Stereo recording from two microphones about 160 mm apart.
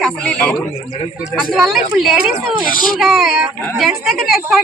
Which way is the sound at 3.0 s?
Centre (ahead or behind).